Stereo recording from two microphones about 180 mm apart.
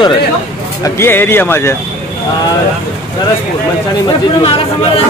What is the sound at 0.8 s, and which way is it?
Speech, 15° left (ahead or behind).